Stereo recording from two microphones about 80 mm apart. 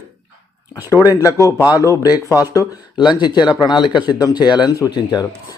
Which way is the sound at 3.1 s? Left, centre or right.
Left.